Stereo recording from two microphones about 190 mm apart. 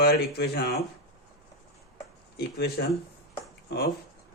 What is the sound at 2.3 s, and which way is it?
Speech, 55° left (ahead or behind).